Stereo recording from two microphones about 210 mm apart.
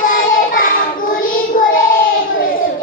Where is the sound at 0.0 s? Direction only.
40° left (ahead or behind).